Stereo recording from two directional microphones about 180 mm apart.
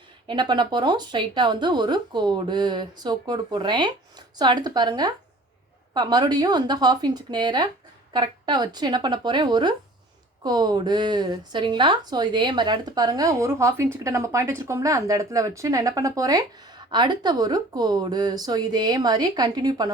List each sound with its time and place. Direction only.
0.3 s speech: 25° right (ahead or behind)